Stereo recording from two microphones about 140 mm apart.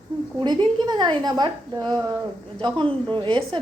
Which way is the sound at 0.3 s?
30° right (ahead or behind).